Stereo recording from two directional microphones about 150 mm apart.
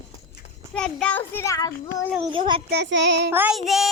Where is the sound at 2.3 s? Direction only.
35° right (ahead or behind).